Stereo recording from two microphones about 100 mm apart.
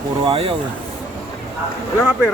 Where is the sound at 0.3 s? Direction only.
65° right (ahead or behind).